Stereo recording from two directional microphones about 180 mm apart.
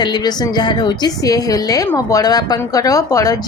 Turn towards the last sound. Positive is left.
turn(degrees=20)  # may be behind; listen again after turning